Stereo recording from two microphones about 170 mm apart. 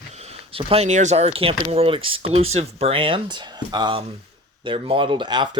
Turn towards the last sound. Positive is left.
turn(degrees=-25)  # may be behind; listen again after turning